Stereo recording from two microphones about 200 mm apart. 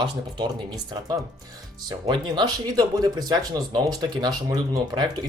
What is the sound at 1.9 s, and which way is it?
Speech, 20° right (ahead or behind).